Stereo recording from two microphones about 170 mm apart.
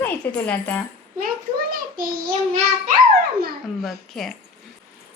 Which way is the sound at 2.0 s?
55° right (ahead or behind).